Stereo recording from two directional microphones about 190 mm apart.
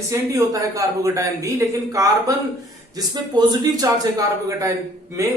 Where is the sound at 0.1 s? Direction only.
15° right (ahead or behind).